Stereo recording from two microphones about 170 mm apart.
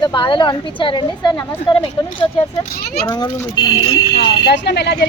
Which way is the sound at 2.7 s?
65° left (ahead or behind).